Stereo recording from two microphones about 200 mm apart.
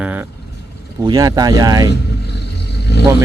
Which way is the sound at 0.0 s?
5° right (ahead or behind).